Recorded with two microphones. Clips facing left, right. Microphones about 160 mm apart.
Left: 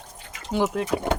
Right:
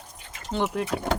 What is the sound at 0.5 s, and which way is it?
Speech, centre (ahead or behind).